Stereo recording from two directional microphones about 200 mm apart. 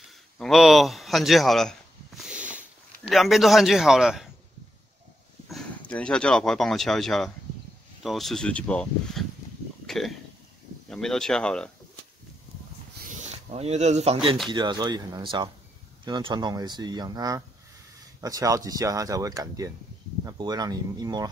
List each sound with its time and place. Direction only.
0.4 s a sound: centre (ahead or behind)
3.0 s a man's voice: centre (ahead or behind)
5.5 s a man's voice: 5° left (ahead or behind)
9.8 s a sound: centre (ahead or behind)
10.9 s a man's voice: centre (ahead or behind)
13.1 s speech: 30° right (ahead or behind)